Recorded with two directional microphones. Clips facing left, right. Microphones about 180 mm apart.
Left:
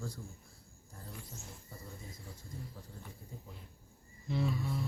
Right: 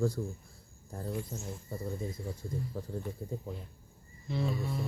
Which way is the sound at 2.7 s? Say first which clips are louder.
Right 13 dB; 55° right (ahead or behind).